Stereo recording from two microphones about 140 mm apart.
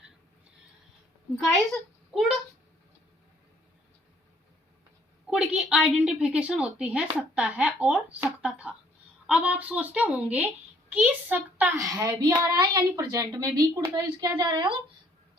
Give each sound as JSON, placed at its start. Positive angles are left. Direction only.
{"t": 1.4, "sound": "a child's voice", "side_deg": 0}
{"t": 5.3, "sound": "a child's voice", "side_deg": -10}